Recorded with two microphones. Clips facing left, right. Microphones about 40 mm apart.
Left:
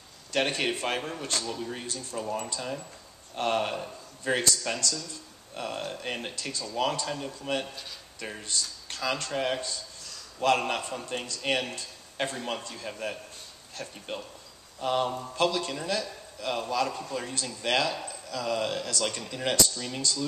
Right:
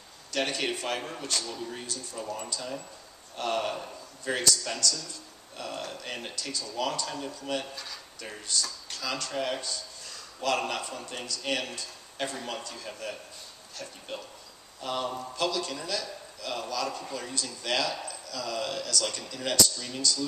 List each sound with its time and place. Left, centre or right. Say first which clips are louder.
0.3 s speech: left 2 dB; left
1.6 s a man's voice: left 2 dB; centre; by 20.2 s left